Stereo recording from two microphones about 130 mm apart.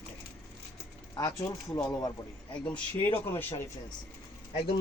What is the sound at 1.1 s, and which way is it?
Speech, 30° left (ahead or behind).